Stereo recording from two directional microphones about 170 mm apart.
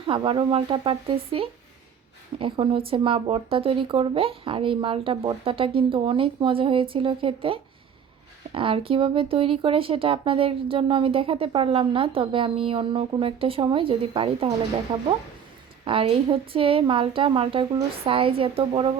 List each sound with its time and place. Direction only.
0.1 s speech: 30° right (ahead or behind)
15.8 s speech: 30° right (ahead or behind)